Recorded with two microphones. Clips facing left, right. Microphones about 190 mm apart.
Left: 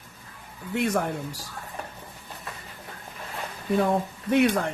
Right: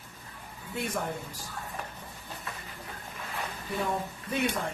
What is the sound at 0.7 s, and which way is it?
Speech, 80° left.